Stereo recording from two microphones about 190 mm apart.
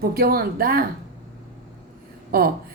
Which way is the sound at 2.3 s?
50° right (ahead or behind).